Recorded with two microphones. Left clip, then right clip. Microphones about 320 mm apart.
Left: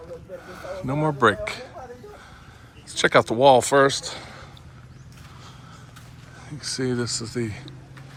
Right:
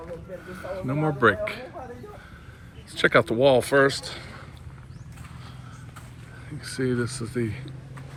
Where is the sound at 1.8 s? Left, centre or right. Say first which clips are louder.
Even; right.